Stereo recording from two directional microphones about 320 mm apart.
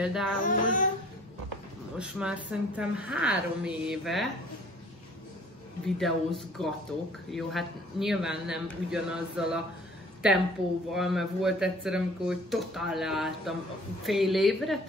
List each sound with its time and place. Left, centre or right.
0.0 s speech: centre
0.4 s a sound: left
2.0 s speech: centre
5.9 s speech: centre
10.9 s speech: centre